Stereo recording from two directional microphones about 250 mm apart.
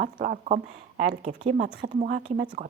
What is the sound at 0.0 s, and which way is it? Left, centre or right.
A woman's voice, right.